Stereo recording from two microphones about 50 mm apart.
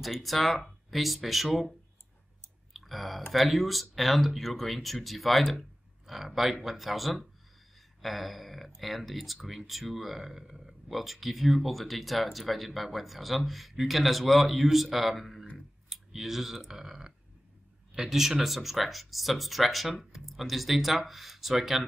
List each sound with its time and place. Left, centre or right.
0.0 s speech: centre
2.7 s speech: centre
15.5 s clicking: centre
17.9 s speech: centre